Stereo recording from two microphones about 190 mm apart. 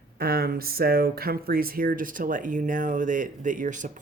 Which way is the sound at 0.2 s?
50° right (ahead or behind).